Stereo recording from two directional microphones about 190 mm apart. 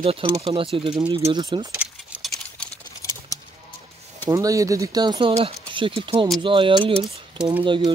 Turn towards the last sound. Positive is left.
turn(degrees=-25)  # may be behind; listen again after turning